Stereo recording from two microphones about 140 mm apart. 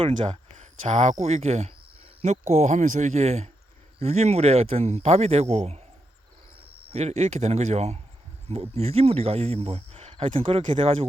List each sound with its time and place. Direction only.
0.6 s speech: 55° right (ahead or behind)
6.9 s speech: 50° right (ahead or behind)